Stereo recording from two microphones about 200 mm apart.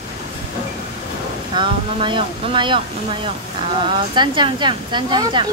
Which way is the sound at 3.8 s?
25° right (ahead or behind).